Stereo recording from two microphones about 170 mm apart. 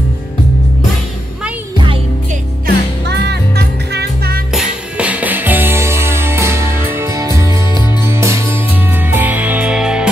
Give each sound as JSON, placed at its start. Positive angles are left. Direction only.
{"t": 2.6, "sound": "music", "side_deg": -80}
{"t": 4.5, "sound": "music", "side_deg": -5}